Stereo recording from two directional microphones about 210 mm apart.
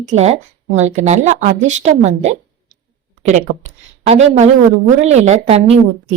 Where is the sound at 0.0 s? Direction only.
35° right (ahead or behind).